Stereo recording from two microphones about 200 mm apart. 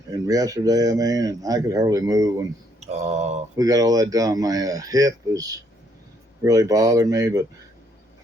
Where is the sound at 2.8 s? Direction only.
35° right (ahead or behind).